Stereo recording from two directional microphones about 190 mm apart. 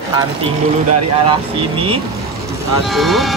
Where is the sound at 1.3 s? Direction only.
30° right (ahead or behind).